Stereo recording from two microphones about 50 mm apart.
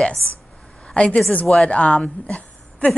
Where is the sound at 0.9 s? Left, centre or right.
Left.